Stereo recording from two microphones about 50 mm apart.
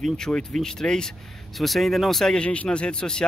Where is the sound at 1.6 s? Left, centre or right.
Centre.